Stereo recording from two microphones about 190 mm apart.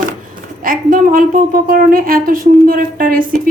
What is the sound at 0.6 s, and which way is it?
A woman's voice, 45° right (ahead or behind).